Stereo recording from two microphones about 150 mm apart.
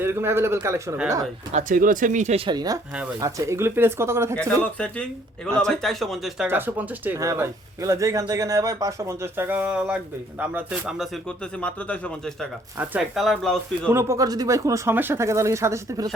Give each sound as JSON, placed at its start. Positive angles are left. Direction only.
{"t": 0.0, "sound": "speech", "side_deg": -15}
{"t": 1.5, "sound": "speech", "side_deg": -60}
{"t": 2.5, "sound": "speech", "side_deg": -25}
{"t": 4.4, "sound": "speech", "side_deg": 5}
{"t": 6.5, "sound": "speech", "side_deg": -15}
{"t": 12.7, "sound": "speech", "side_deg": -10}
{"t": 13.1, "sound": "speech", "side_deg": 0}
{"t": 13.9, "sound": "speech", "side_deg": -20}